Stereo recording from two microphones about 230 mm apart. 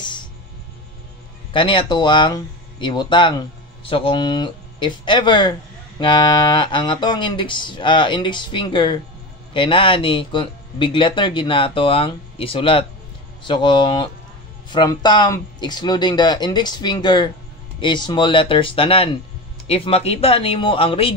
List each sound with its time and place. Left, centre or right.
1.5 s speech: left